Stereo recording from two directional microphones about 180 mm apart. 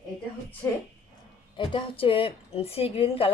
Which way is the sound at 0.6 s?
15° left (ahead or behind).